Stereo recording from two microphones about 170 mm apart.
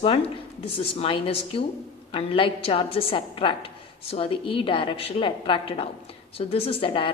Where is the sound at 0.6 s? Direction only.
35° left (ahead or behind).